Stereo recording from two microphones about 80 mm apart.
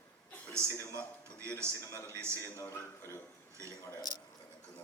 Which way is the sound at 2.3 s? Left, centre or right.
Left.